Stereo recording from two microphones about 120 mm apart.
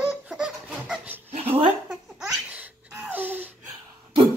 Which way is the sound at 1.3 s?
55° right (ahead or behind).